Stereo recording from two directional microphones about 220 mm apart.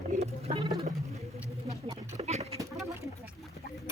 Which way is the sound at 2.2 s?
30° right (ahead or behind).